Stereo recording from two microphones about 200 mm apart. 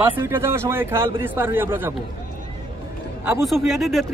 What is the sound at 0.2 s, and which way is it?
Speech, 10° right (ahead or behind).